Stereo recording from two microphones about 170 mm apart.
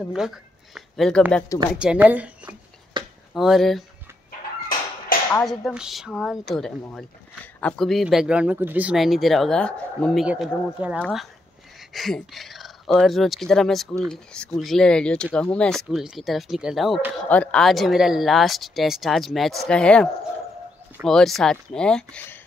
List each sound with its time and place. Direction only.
0.0 s speech: centre (ahead or behind)
2.9 s a sound: 25° right (ahead or behind)
3.3 s speech: centre (ahead or behind)
5.4 s speech: centre (ahead or behind)
10.2 s speech: 5° right (ahead or behind)
11.0 s speech: 5° left (ahead or behind)